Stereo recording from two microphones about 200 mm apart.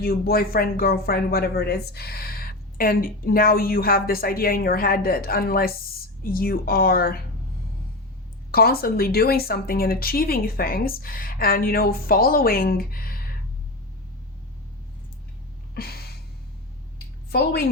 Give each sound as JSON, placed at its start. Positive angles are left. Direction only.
{"t": 0.0, "sound": "speech", "side_deg": 50}
{"t": 8.5, "sound": "speech", "side_deg": 50}
{"t": 15.7, "sound": "a sound", "side_deg": 50}